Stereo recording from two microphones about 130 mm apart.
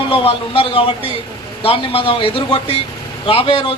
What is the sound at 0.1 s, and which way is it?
Speech, 45° left (ahead or behind).